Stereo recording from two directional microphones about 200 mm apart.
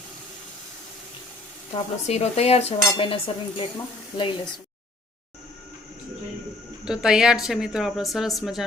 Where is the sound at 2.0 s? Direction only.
35° left (ahead or behind).